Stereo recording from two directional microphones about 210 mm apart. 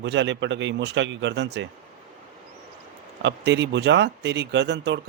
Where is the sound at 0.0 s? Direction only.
60° right (ahead or behind).